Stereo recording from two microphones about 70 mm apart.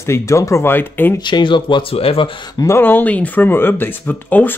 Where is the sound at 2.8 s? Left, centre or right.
Left.